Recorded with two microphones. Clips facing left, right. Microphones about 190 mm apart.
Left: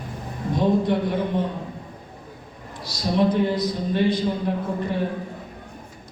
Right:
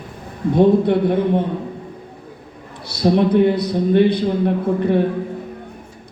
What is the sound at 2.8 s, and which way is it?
A man's voice, 60° right (ahead or behind).